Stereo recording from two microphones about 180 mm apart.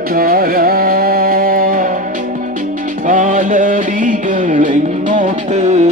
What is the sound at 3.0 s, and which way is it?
Music, 45° right (ahead or behind).